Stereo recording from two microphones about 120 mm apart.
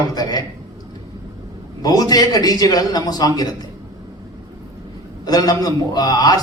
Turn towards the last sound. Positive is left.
turn(degrees=35)  # may be behind; listen again after turning